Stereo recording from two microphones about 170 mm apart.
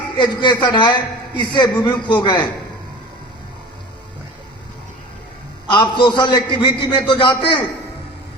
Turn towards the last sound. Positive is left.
turn(degrees=30)  # may be behind; listen again after turning